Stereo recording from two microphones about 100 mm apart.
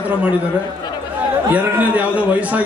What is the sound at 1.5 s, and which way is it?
A man's voice, 15° right (ahead or behind).